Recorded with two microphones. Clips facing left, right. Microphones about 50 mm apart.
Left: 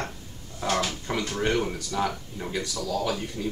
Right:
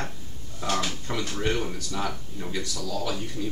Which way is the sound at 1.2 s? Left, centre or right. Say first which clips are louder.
Left 2 dB; centre.